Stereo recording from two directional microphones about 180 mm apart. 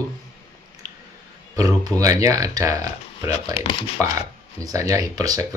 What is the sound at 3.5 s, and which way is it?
Speech, 30° left (ahead or behind).